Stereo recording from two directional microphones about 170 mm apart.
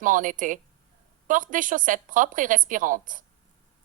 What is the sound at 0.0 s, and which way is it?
Speech, 50° right (ahead or behind).